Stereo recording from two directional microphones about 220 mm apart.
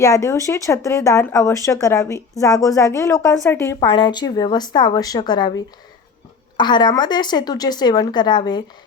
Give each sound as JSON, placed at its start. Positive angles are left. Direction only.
{"t": 0.0, "sound": "speech", "side_deg": 15}